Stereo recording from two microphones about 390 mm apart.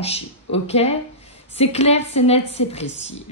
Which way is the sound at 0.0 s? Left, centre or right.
Centre.